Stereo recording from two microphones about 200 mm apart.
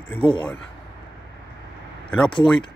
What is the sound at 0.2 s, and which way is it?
Speech, 25° left (ahead or behind).